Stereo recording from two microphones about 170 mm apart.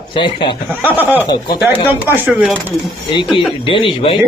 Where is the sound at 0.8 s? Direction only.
10° right (ahead or behind).